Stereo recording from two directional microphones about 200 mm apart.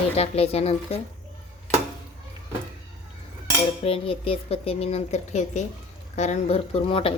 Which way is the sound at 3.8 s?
30° left (ahead or behind).